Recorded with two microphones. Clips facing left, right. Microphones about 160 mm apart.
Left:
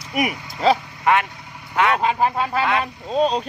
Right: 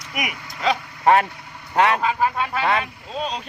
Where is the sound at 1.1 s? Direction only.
35° right (ahead or behind).